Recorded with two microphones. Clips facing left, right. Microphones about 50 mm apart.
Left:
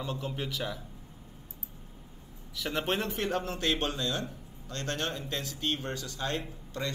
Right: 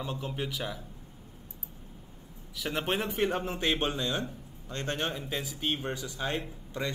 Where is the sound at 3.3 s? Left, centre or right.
Centre.